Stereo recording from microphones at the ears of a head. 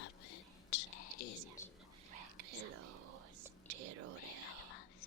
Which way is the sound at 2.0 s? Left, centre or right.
Right.